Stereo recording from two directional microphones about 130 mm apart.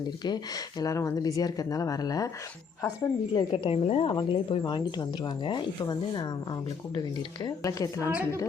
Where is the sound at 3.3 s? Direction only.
40° left (ahead or behind).